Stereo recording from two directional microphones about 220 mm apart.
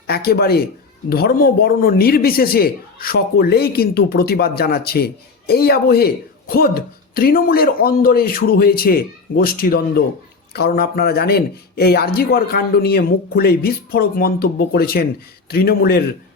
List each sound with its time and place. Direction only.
0.1 s a man's voice: 45° left (ahead or behind)